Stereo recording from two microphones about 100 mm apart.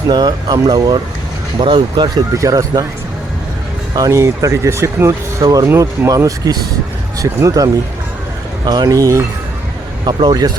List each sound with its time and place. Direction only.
0.1 s speech: 45° right (ahead or behind)
1.5 s speech: 55° right (ahead or behind)
2.1 s speech: 35° right (ahead or behind)
3.9 s speech: 35° right (ahead or behind)
10.1 s speech: 55° right (ahead or behind)
10.3 s speech: 40° right (ahead or behind)